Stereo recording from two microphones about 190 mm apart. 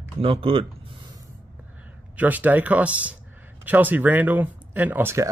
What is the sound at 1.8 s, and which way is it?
Speech, 10° right (ahead or behind).